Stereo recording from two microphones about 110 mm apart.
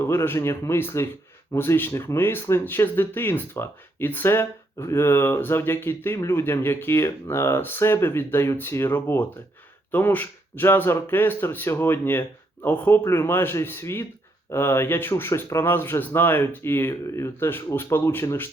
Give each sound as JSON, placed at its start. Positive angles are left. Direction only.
{"t": 0.0, "sound": "speech", "side_deg": 20}